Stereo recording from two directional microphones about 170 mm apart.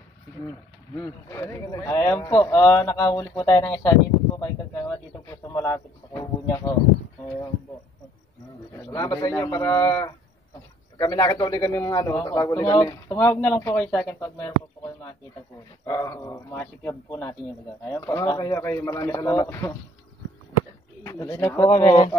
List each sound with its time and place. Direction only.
0.9 s a man's voice: 20° left (ahead or behind)
8.9 s a man's voice: 25° left (ahead or behind)
15.8 s a man's voice: 20° left (ahead or behind)
21.0 s a man's voice: 15° left (ahead or behind)